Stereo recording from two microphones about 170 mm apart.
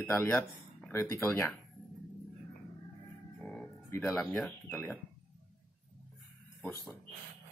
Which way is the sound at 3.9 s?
15° left (ahead or behind).